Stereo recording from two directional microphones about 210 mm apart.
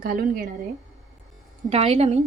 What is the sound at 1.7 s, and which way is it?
Speech, 30° right (ahead or behind).